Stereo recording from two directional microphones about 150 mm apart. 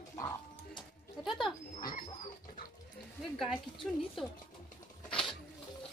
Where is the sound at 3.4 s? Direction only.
Centre (ahead or behind).